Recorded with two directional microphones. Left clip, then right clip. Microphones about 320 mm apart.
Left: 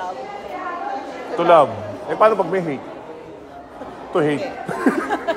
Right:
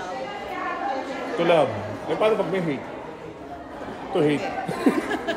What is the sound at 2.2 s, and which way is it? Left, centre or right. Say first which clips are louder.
Speech: left 7 dB; left.